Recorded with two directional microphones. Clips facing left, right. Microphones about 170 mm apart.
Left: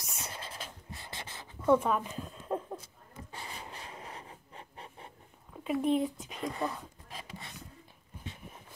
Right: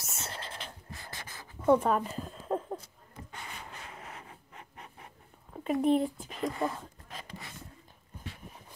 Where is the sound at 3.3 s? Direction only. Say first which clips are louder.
Left 1 dB; 30° left (ahead or behind).